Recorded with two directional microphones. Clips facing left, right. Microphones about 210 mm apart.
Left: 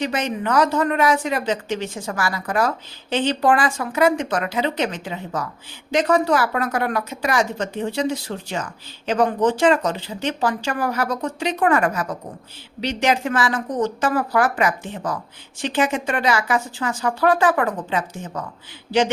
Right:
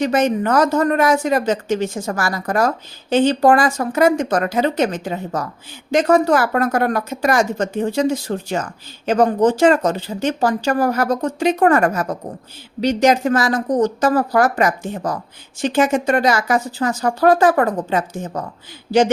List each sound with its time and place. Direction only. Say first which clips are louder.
0.0 s a woman's voice: right 7 dB; 45° right (ahead or behind)